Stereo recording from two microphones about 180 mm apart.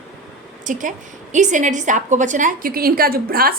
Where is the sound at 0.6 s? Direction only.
45° right (ahead or behind).